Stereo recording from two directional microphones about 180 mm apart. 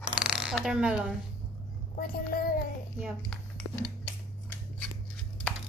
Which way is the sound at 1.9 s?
50° left (ahead or behind).